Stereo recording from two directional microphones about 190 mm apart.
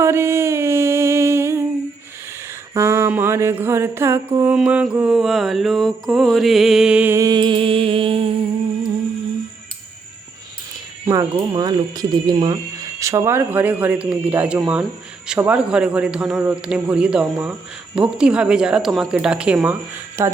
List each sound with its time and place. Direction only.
0.0 s music: 15° right (ahead or behind)
2.7 s mantra: 15° right (ahead or behind); by 8.4 s 30° right (ahead or behind)
11.0 s speech: 15° right (ahead or behind)
13.0 s mantra: 15° right (ahead or behind)
15.3 s speech: 5° right (ahead or behind)
20.2 s mantra: 15° right (ahead or behind)